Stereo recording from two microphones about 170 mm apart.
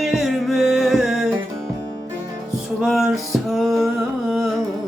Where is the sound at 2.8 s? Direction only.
Centre (ahead or behind).